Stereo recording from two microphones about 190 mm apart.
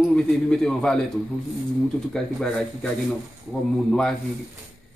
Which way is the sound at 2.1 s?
5° left (ahead or behind).